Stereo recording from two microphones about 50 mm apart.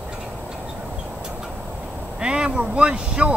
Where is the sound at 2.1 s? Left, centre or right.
Centre.